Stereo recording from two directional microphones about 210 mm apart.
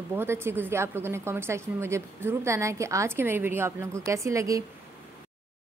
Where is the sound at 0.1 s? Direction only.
10° right (ahead or behind).